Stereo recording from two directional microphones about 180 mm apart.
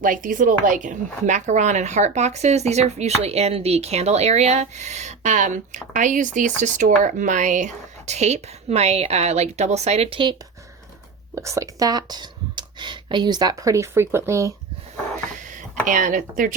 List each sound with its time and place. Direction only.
0.0 s speech: 50° right (ahead or behind); by 10.3 s 30° right (ahead or behind)
11.3 s speech: 15° right (ahead or behind)
15.4 s speech: 45° right (ahead or behind)